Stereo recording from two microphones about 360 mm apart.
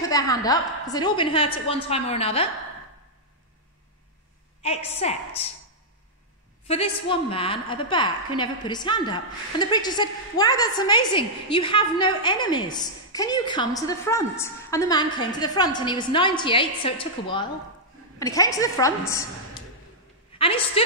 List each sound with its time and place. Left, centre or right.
0.1 s a woman's voice: centre
4.6 s a woman's voice: centre
6.7 s a woman's voice: centre
20.3 s a woman's voice: centre